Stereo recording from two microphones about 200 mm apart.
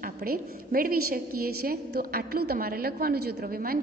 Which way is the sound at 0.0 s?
50° right (ahead or behind).